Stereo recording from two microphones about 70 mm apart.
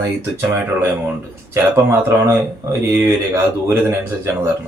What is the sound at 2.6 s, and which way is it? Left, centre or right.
Speech, right.